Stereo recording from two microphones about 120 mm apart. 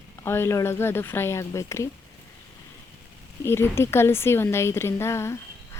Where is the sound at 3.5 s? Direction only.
20° left (ahead or behind).